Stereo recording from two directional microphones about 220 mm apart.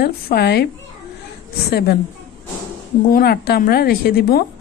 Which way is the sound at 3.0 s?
45° left (ahead or behind).